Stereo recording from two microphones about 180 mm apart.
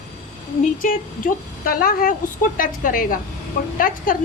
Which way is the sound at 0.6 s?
50° left (ahead or behind).